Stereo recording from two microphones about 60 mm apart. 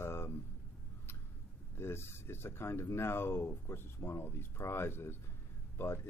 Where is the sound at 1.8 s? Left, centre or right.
Left.